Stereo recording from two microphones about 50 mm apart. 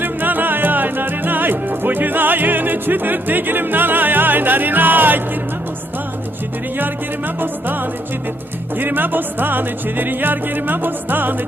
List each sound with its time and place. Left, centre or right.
0.0 s music: right
7.4 s music: right